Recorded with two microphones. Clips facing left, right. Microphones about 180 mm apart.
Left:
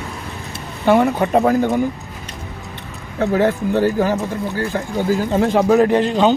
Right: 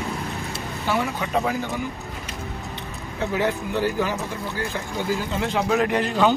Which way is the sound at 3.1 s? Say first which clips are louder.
Left 7 dB; 50° left (ahead or behind).